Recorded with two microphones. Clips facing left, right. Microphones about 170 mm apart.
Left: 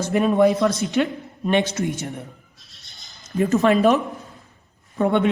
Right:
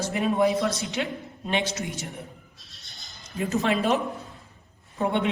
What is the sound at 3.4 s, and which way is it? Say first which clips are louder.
Speech: left 8 dB; 45° left (ahead or behind).